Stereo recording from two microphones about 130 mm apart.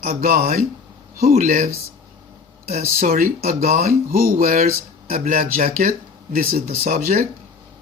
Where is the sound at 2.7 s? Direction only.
90° right.